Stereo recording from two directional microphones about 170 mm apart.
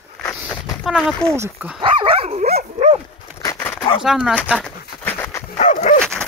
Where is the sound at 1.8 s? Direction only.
30° right (ahead or behind).